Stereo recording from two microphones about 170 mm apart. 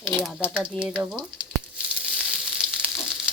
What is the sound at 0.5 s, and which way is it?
Frying, 5° right (ahead or behind).